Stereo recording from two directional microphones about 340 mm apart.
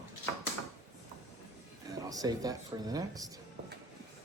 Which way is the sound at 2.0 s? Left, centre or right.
Centre.